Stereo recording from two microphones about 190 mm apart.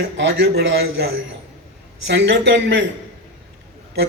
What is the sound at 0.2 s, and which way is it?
Speech, 60° right (ahead or behind).